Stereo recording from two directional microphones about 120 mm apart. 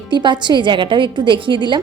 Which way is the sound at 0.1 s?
40° right (ahead or behind).